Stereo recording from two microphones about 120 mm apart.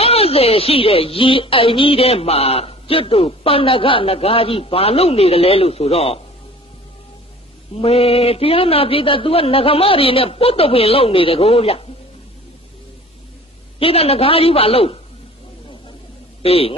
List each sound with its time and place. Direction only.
0.0 s speech: 55° left (ahead or behind)
7.7 s speech: 55° left (ahead or behind)
13.7 s speech: 55° left (ahead or behind)
16.4 s speech: 55° left (ahead or behind)